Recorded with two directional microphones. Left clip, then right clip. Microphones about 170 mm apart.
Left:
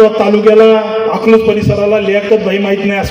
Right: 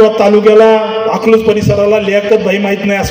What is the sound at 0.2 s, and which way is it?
A man's voice, 35° right (ahead or behind).